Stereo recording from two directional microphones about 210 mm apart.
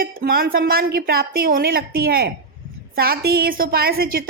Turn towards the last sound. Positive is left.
turn(degrees=-45)  # may be behind; listen again after turning